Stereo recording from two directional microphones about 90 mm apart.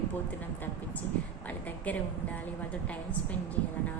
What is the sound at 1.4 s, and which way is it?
Speech, 20° left (ahead or behind).